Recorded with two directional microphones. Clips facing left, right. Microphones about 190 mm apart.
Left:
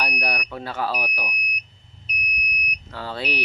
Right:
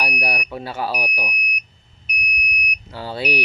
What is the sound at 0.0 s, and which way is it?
Smoke detector, 10° right (ahead or behind).